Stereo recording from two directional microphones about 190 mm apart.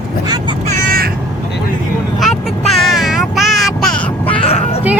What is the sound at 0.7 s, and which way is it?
Crow, 50° right (ahead or behind).